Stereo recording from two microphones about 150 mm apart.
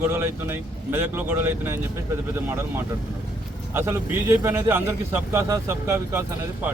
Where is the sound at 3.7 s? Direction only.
15° right (ahead or behind).